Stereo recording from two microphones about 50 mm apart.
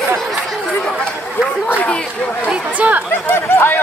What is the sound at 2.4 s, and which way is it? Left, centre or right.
Chatter, right.